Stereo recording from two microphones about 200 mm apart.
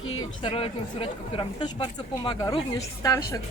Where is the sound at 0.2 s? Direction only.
25° left (ahead or behind).